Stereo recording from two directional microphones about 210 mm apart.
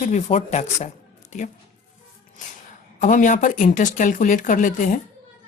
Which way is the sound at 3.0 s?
35° left (ahead or behind).